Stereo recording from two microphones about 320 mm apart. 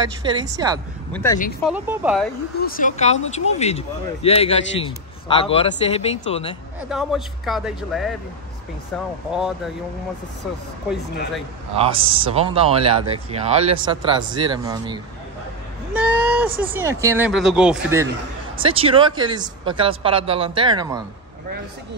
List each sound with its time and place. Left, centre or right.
0.2 s speech: centre
1.1 s speech: centre
1.6 s a man's voice: centre
2.6 s a man's voice: left
6.9 s a man's voice: centre
11.7 s speech: centre
18.6 s speech: centre